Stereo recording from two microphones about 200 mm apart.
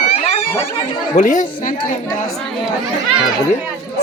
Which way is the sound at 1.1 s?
40° left (ahead or behind).